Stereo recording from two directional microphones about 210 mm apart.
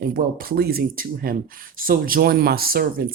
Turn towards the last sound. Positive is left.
turn(degrees=-45)  # may be behind; listen again after turning